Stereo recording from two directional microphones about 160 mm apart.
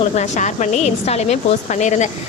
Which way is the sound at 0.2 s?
50° left (ahead or behind).